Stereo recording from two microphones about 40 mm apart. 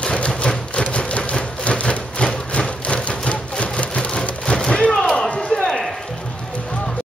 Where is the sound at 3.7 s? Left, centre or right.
Left.